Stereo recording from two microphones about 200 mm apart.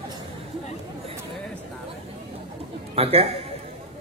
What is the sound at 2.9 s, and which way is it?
Speech, 30° right (ahead or behind).